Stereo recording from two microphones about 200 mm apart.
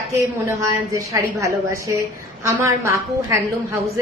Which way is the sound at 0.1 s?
15° right (ahead or behind).